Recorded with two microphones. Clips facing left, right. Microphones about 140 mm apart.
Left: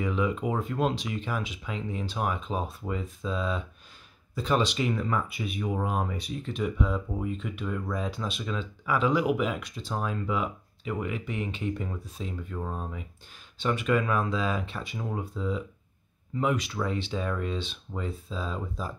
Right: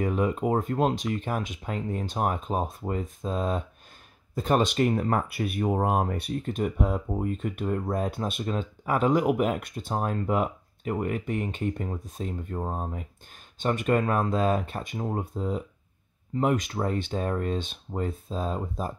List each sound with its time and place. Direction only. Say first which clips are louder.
0.0 s speech: right 2 dB; 45° right (ahead or behind)